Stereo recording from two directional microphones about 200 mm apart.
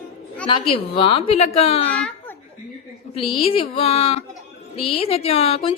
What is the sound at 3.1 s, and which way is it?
A woman's voice, 30° left (ahead or behind).